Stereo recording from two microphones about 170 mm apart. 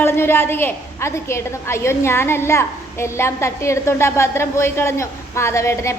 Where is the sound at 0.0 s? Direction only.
15° left (ahead or behind).